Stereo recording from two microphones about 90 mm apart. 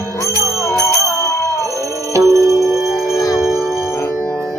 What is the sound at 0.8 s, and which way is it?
Music, 35° left (ahead or behind).